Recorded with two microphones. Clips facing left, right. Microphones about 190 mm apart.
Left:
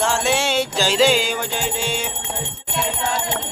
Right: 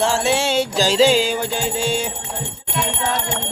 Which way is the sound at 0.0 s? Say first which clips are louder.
Right 2 dB; 35° right (ahead or behind).